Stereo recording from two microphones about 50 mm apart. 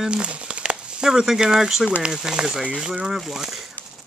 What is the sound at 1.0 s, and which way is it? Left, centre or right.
Speech, centre.